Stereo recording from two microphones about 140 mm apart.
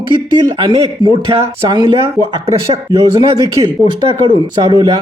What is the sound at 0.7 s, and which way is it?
Speech, 40° right (ahead or behind).